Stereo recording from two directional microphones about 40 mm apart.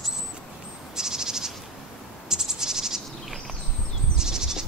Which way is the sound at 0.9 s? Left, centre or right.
Centre.